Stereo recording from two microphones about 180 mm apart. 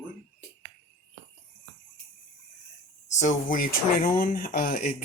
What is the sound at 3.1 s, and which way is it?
Speech, 45° left (ahead or behind).